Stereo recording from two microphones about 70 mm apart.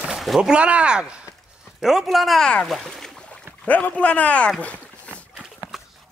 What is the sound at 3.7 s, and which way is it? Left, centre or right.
Speech, left.